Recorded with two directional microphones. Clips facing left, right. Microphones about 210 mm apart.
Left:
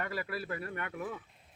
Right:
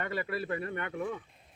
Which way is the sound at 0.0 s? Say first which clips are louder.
Right 3 dB; centre (ahead or behind).